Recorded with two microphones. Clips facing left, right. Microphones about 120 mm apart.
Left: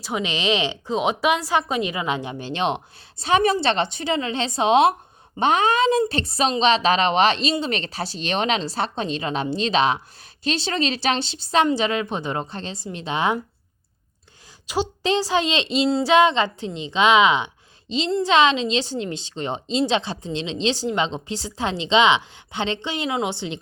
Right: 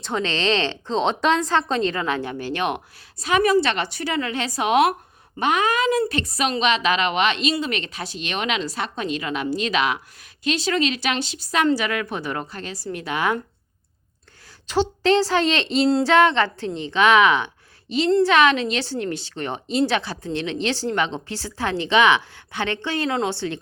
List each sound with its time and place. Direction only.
0.0 s a woman's voice: 10° left (ahead or behind)
14.7 s a woman's voice: 15° left (ahead or behind)